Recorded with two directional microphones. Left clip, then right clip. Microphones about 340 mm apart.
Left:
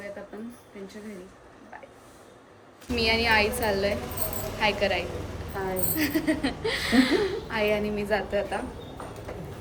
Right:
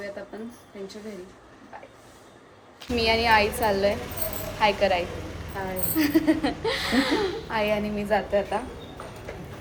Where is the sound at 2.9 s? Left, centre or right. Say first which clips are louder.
Right 2 dB; centre.